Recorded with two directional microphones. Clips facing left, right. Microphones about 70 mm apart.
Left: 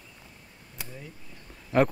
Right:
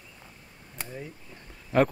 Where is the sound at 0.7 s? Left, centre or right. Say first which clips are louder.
Right 4 dB; right.